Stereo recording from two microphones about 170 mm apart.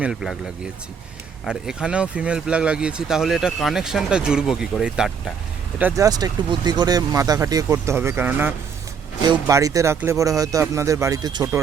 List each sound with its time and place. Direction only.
0.0 s speech: 5° right (ahead or behind)
5.8 s speech: 20° right (ahead or behind)